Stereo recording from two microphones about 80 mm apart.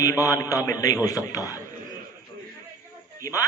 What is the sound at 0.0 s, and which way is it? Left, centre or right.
A man's voice, left.